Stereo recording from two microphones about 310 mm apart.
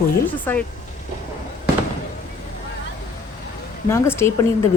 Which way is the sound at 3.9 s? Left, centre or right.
Centre.